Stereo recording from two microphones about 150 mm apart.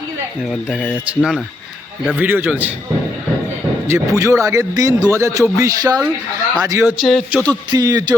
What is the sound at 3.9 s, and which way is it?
Speech, 20° right (ahead or behind).